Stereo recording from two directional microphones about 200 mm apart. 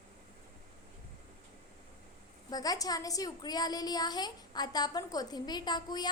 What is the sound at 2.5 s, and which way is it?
A woman's voice, 20° left (ahead or behind).